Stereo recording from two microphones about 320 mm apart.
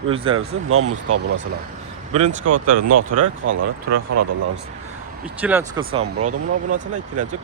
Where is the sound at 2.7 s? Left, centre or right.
Right.